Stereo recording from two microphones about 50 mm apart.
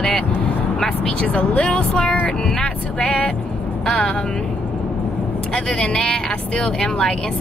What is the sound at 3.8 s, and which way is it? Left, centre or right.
Speech, centre.